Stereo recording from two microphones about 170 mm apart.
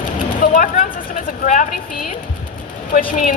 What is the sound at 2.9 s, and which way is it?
Speech, 55° left (ahead or behind).